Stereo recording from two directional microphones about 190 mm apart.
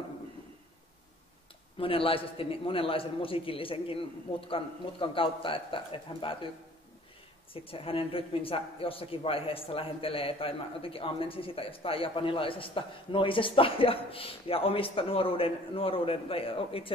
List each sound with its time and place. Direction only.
1.8 s a man's voice: 30° left (ahead or behind)
7.5 s a man's voice: 30° left (ahead or behind)